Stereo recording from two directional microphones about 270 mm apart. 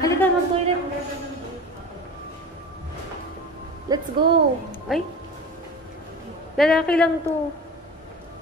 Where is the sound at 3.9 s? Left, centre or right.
Centre.